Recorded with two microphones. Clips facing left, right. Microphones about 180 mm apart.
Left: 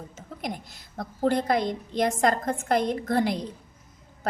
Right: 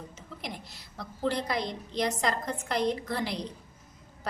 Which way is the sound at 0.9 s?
50° left (ahead or behind).